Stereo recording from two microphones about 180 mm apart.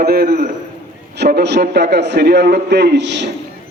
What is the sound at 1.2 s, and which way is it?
A man's voice, 70° right (ahead or behind).